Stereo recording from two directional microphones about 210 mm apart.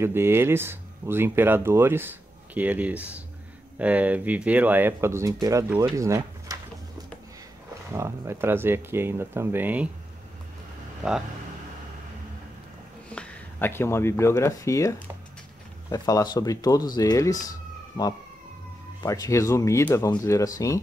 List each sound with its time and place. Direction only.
0.0 s speech: 10° right (ahead or behind)
5.9 s a sound: 15° right (ahead or behind)
7.9 s speech: 10° right (ahead or behind)
11.0 s speech: 5° right (ahead or behind)
13.1 s speech: 5° left (ahead or behind)
17.5 s a sound: 20° left (ahead or behind)
19.0 s speech: 15° left (ahead or behind)